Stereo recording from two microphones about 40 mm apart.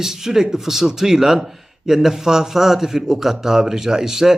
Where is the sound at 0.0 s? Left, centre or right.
Centre.